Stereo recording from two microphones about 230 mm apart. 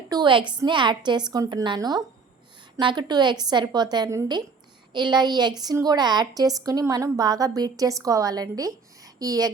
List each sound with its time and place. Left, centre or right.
0.1 s a woman's voice: centre